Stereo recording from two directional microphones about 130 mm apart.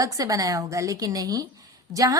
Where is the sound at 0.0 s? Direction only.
25° right (ahead or behind).